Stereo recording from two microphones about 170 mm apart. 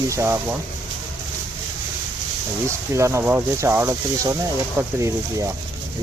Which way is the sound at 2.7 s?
15° right (ahead or behind).